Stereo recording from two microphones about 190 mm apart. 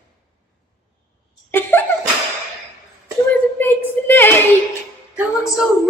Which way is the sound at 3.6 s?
10° left (ahead or behind).